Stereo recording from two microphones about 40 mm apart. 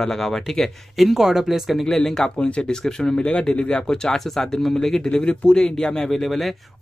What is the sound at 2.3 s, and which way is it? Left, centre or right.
Speech, left.